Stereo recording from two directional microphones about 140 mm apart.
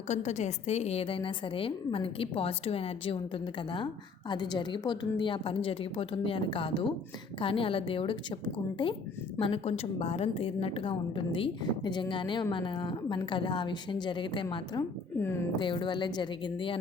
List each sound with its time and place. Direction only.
0.1 s a woman's voice: 55° left (ahead or behind); by 8.4 s 35° left (ahead or behind)
9.4 s a woman's voice: 45° left (ahead or behind)
15.5 s a woman's voice: 35° left (ahead or behind)